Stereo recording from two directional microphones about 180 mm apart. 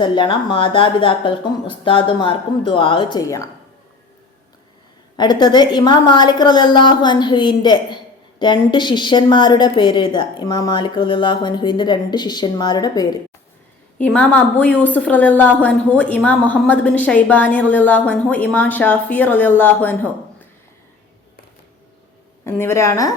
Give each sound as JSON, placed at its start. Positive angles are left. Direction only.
{"t": 0.0, "sound": "a woman's voice", "side_deg": 25}
{"t": 5.1, "sound": "a woman's voice", "side_deg": 25}
{"t": 14.0, "sound": "a woman's voice", "side_deg": 5}
{"t": 22.4, "sound": "a woman's voice", "side_deg": 15}